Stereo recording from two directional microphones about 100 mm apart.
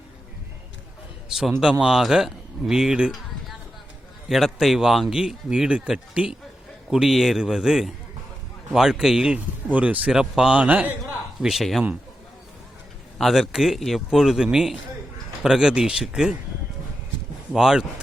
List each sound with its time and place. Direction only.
1.3 s speech: 5° right (ahead or behind)
11.3 s speech: centre (ahead or behind)
13.1 s speech: centre (ahead or behind)
17.5 s speech: 5° right (ahead or behind)